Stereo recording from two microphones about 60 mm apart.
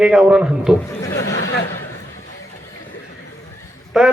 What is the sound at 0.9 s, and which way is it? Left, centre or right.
Speech, left.